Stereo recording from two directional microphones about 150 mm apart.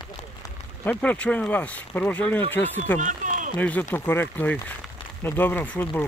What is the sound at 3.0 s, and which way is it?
Run, 55° right (ahead or behind).